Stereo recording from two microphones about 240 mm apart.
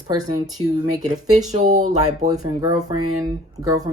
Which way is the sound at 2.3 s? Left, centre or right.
Centre.